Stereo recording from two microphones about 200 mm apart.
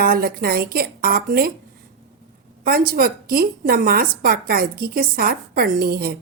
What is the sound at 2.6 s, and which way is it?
A woman's voice, 45° right (ahead or behind).